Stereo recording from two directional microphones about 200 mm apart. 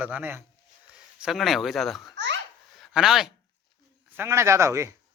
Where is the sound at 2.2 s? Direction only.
65° right (ahead or behind).